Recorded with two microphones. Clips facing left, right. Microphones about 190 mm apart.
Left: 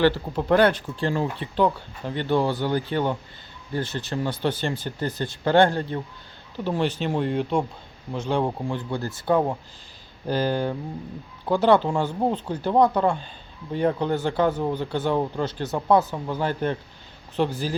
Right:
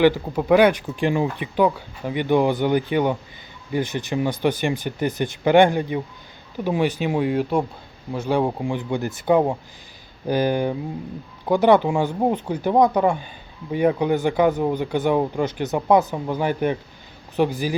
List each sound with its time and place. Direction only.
0.0 s speech: 10° right (ahead or behind)